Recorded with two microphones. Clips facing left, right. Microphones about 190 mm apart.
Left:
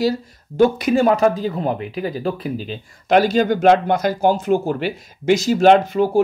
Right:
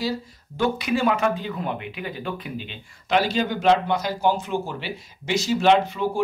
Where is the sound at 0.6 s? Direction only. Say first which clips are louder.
Left 8 dB; 45° left (ahead or behind).